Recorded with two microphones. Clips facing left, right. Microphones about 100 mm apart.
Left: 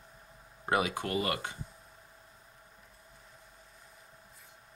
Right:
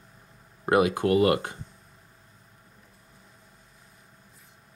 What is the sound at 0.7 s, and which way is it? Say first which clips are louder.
Speech: right 9 dB; 55° right (ahead or behind).